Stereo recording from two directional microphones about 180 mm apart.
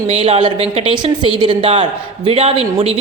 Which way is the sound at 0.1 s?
35° right (ahead or behind).